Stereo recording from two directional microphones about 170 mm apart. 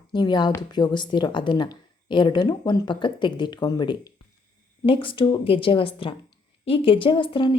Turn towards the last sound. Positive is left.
turn(degrees=30)  # may be behind; listen again after turning